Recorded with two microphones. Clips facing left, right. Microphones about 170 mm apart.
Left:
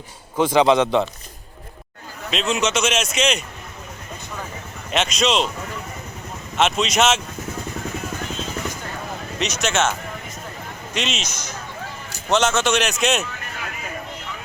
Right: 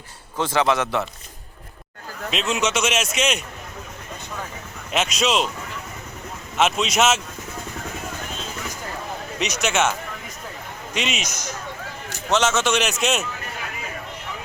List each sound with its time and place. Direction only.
0.3 s a man's voice: 15° left (ahead or behind)
2.3 s a man's voice: 5° right (ahead or behind)
4.9 s a man's voice: 5° right (ahead or behind)
6.6 s a man's voice: 5° right (ahead or behind)
9.4 s speech: 10° right (ahead or behind)
10.9 s speech: 10° right (ahead or behind)
12.3 s a man's voice: 5° right (ahead or behind)